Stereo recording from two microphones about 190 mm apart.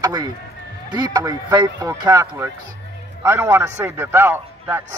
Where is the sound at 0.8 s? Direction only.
20° right (ahead or behind).